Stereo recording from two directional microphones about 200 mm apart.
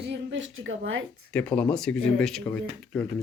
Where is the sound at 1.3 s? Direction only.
5° left (ahead or behind).